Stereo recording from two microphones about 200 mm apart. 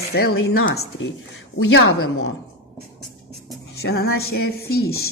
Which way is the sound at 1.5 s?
90° left.